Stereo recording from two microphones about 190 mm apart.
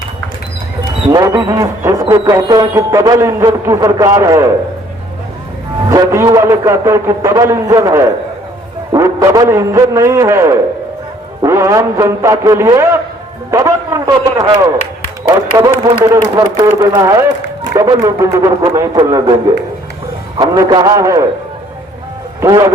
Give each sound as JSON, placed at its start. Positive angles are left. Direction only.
{"t": 1.1, "sound": "music", "side_deg": -20}
{"t": 5.9, "sound": "music", "side_deg": -20}
{"t": 15.3, "sound": "a man's voice", "side_deg": -20}
{"t": 16.1, "sound": "music", "side_deg": -20}
{"t": 20.4, "sound": "a man's voice", "side_deg": -20}
{"t": 22.4, "sound": "music", "side_deg": -20}